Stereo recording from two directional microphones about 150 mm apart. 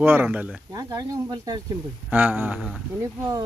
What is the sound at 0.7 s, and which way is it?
Speech, 25° right (ahead or behind).